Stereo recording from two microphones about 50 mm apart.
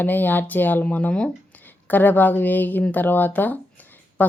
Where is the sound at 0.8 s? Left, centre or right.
Left.